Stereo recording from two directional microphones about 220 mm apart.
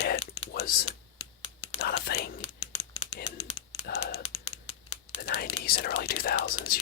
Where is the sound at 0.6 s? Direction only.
45° left (ahead or behind).